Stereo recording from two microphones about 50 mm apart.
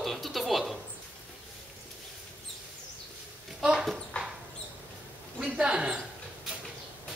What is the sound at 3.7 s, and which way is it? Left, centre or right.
Dog, centre.